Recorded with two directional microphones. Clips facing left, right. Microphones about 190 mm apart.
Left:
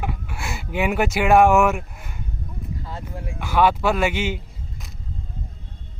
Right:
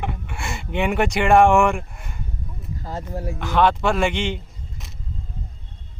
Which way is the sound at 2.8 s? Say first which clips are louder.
Right 4 dB; 40° right (ahead or behind).